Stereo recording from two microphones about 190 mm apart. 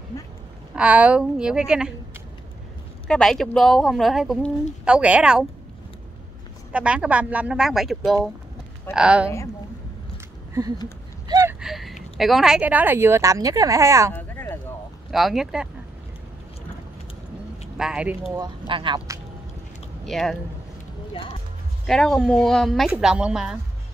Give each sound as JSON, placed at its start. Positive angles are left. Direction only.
{"t": 0.7, "sound": "speech", "side_deg": -5}
{"t": 3.1, "sound": "speech", "side_deg": 0}
{"t": 6.7, "sound": "speech", "side_deg": -5}
{"t": 11.2, "sound": "gasp", "side_deg": -15}
{"t": 11.6, "sound": "a woman's voice", "side_deg": 0}
{"t": 14.1, "sound": "a sound", "side_deg": 10}
{"t": 15.0, "sound": "speech", "side_deg": 0}
{"t": 17.7, "sound": "speech", "side_deg": -5}
{"t": 18.7, "sound": "speech", "side_deg": -25}
{"t": 20.1, "sound": "speech", "side_deg": 0}
{"t": 21.8, "sound": "speech", "side_deg": 0}